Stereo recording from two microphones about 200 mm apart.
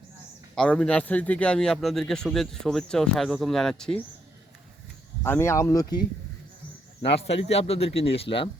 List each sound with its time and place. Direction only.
0.5 s speech: 5° left (ahead or behind)
5.2 s speech: 10° left (ahead or behind)
7.1 s speech: 30° left (ahead or behind)